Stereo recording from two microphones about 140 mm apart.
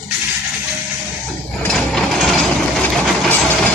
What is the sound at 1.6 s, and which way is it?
Mechanisms, 5° left (ahead or behind).